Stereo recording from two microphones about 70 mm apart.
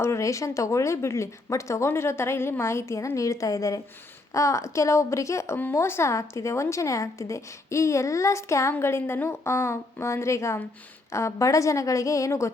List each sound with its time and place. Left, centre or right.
0.0 s a woman's voice: left